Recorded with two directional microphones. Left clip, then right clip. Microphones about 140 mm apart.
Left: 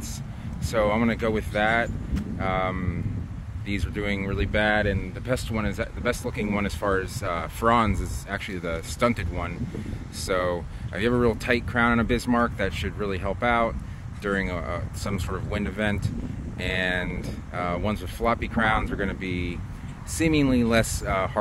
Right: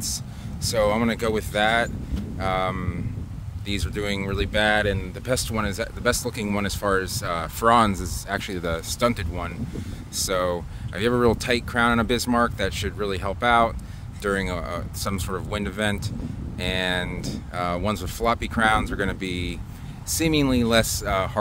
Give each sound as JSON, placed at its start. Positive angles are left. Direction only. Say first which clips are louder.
{"t": 0.7, "sound": "speech", "louder": "right 2 dB", "side_deg": -45}
{"t": 20.1, "sound": "speech", "louder": "right 1 dB", "side_deg": -25}